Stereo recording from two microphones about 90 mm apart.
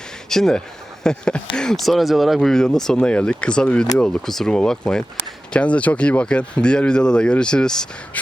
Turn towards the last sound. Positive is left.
turn(degrees=5)  # may be behind; listen again after turning